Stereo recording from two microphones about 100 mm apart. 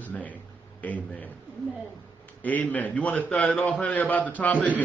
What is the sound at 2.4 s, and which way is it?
A man's voice, 15° left (ahead or behind).